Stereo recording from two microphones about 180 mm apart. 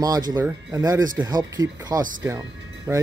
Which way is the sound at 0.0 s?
20° right (ahead or behind).